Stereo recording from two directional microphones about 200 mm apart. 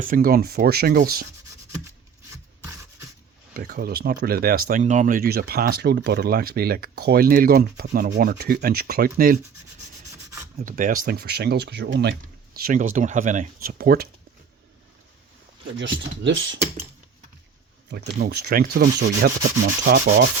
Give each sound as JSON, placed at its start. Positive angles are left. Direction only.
{"t": 0.0, "sound": "speech", "side_deg": -45}
{"t": 3.5, "sound": "speech", "side_deg": -50}
{"t": 10.6, "sound": "speech", "side_deg": -45}
{"t": 12.5, "sound": "speech", "side_deg": -45}
{"t": 15.8, "sound": "speech", "side_deg": -70}
{"t": 17.9, "sound": "speech", "side_deg": -55}